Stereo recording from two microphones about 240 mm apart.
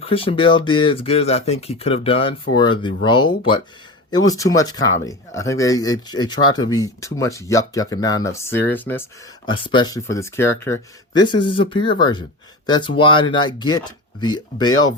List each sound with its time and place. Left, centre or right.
0.1 s speech: left
9.5 s speech: centre